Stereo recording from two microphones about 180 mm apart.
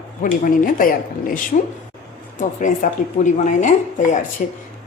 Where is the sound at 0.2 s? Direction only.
50° left (ahead or behind).